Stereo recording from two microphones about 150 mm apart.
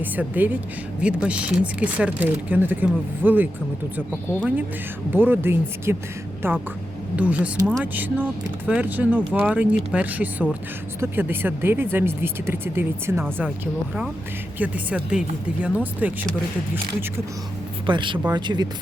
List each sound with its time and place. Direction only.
0.0 s speech: 10° right (ahead or behind)
5.1 s speech: 15° right (ahead or behind)
14.6 s speech: 10° right (ahead or behind)
17.8 s speech: 30° right (ahead or behind)